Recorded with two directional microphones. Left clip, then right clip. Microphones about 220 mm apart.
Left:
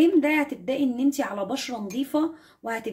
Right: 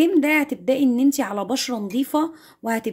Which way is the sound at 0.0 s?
45° right (ahead or behind).